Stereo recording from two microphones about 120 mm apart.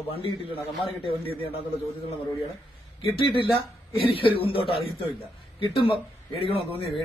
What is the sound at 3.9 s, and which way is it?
Speech, 50° left (ahead or behind).